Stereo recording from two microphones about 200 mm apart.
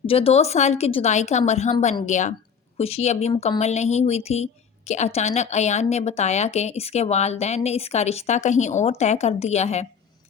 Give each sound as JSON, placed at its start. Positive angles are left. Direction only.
{"t": 0.0, "sound": "speech", "side_deg": 30}